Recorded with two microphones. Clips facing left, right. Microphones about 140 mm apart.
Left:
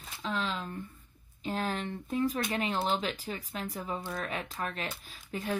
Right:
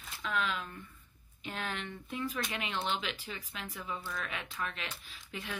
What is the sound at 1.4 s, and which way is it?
Speech, 35° left (ahead or behind).